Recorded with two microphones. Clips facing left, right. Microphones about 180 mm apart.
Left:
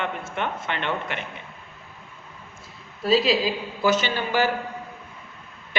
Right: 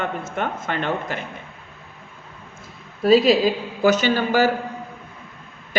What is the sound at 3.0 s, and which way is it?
A man's voice, 50° right (ahead or behind).